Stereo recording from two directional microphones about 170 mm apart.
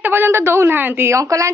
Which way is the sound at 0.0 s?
15° right (ahead or behind).